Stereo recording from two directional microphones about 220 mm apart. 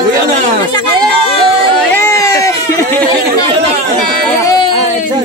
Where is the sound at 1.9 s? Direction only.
10° left (ahead or behind).